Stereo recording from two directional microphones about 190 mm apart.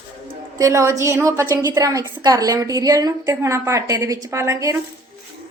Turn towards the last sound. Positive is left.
turn(degrees=-15)  # may be behind; listen again after turning